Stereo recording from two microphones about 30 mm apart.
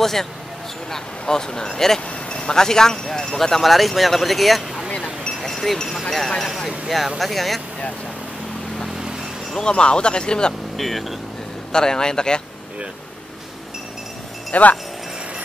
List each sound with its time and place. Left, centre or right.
0.0 s speech: centre
2.2 s speech: left; by 4.9 s centre
5.4 s speech: centre
8.9 s vehicle: right
9.7 s speech: left
10.8 s speech: centre
11.7 s speech: left
14.5 s speech: left